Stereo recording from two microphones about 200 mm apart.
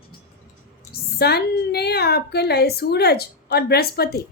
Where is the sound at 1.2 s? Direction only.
55° left (ahead or behind).